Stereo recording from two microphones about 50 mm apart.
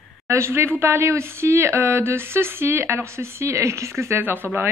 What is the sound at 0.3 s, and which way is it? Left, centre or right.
A woman's voice, right.